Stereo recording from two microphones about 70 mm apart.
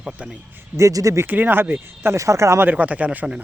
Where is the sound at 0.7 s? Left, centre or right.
Right.